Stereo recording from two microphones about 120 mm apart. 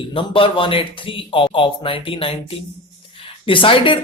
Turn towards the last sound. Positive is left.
turn(degrees=45)  # may be behind; listen again after turning